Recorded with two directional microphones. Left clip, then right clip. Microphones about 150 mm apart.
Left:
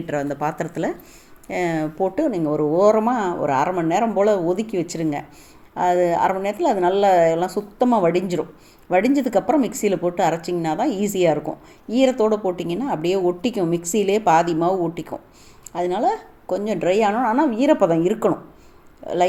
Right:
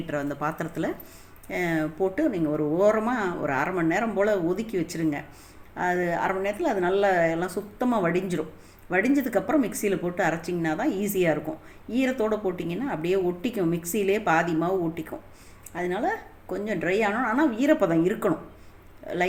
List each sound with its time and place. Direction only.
0.1 s speech: 35° left (ahead or behind)